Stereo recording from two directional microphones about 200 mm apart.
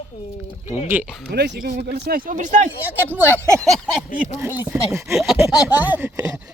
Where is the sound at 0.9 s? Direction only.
5° right (ahead or behind).